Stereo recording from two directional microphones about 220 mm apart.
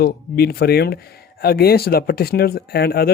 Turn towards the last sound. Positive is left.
turn(degrees=45)  # may be behind; listen again after turning